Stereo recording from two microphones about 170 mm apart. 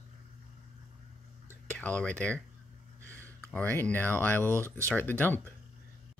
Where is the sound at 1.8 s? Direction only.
10° left (ahead or behind).